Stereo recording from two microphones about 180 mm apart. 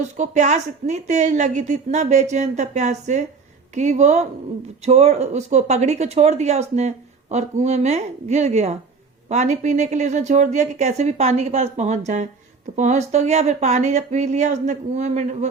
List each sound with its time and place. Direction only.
0.0 s speech: 40° right (ahead or behind)